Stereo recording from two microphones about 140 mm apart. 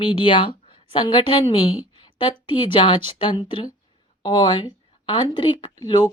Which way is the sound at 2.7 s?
35° left (ahead or behind).